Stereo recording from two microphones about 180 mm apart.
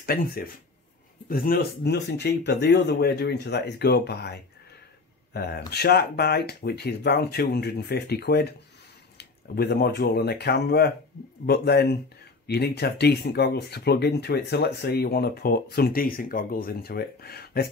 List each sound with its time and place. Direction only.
0.0 s speech: 55° left (ahead or behind)